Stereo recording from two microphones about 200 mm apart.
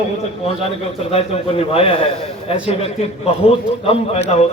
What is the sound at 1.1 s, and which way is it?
A man's voice, 30° left (ahead or behind).